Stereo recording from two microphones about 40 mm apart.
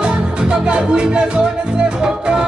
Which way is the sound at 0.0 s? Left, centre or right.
Right.